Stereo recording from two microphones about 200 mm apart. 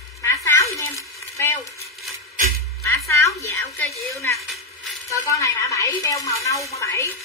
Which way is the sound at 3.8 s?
Centre (ahead or behind).